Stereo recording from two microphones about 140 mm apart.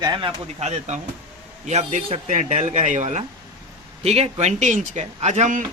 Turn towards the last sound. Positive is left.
turn(degrees=-60)  # may be behind; listen again after turning